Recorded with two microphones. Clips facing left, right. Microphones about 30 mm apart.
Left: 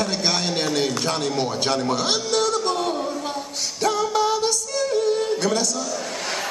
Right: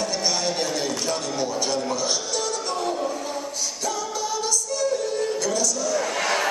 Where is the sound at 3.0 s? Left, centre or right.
Left.